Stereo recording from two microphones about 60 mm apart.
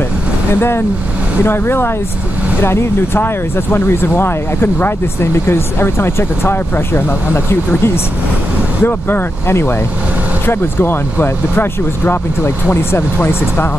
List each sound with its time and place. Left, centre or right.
0.6 s speech: left